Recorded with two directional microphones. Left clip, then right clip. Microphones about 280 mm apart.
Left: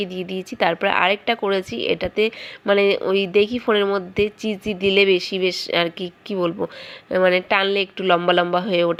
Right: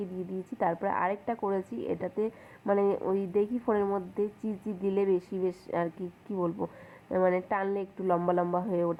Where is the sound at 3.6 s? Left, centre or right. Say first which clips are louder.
Left 10 dB; left.